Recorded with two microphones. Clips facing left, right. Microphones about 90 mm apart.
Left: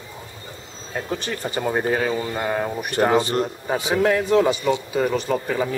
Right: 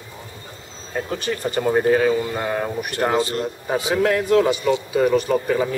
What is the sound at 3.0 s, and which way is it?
Speech, 15° left (ahead or behind).